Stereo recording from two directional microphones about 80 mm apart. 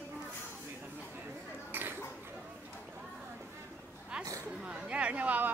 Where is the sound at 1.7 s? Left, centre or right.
Right.